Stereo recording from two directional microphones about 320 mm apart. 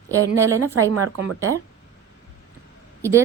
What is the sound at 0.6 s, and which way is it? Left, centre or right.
Speech, right.